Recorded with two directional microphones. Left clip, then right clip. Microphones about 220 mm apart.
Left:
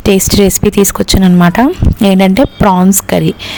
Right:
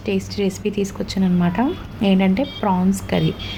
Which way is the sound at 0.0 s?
50° left (ahead or behind).